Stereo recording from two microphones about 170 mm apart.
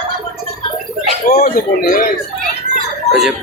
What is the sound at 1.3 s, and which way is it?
Speech, 60° left (ahead or behind).